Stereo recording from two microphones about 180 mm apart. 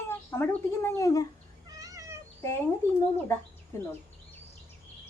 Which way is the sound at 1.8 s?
20° right (ahead or behind).